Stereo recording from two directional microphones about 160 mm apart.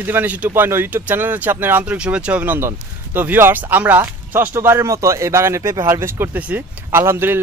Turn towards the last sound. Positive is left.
turn(degrees=-15)  # may be behind; listen again after turning